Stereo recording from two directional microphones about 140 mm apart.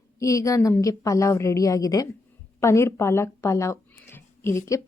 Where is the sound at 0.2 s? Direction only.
25° left (ahead or behind).